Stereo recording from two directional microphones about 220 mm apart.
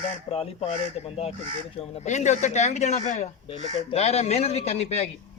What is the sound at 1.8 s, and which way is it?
A man's voice, 30° left (ahead or behind).